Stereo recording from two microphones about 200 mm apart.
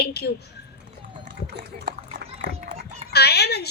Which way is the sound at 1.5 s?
45° right (ahead or behind).